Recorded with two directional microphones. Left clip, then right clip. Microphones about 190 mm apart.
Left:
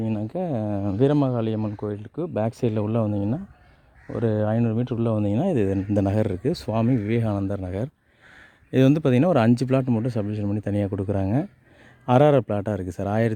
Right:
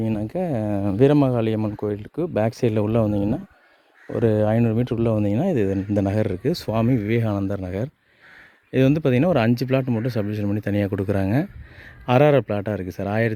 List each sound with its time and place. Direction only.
0.0 s speech: centre (ahead or behind)
8.7 s speech: 20° left (ahead or behind)